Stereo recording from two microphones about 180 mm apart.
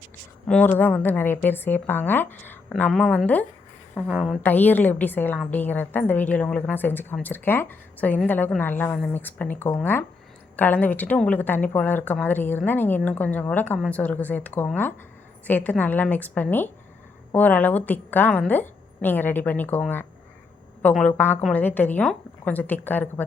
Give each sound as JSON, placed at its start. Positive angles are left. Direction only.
{"t": 0.4, "sound": "a woman's voice", "side_deg": 10}